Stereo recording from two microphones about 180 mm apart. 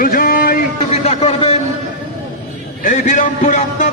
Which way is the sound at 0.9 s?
35° left (ahead or behind).